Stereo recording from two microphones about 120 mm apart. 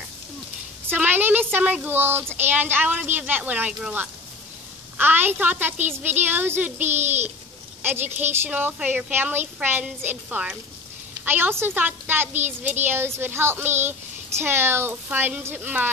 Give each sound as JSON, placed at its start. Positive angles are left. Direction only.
{"t": 0.8, "sound": "a woman's voice", "side_deg": -15}